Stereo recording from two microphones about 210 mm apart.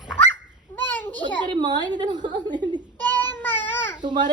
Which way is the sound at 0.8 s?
10° left (ahead or behind).